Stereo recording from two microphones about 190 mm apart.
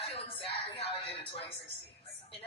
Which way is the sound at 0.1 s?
30° left (ahead or behind).